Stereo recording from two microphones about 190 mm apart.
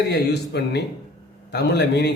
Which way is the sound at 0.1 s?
60° left (ahead or behind).